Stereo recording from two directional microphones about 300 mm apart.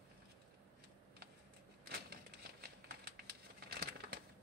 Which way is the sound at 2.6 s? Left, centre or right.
Right.